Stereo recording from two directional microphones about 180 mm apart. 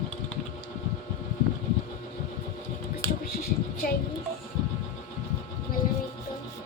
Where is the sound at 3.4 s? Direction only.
55° left (ahead or behind).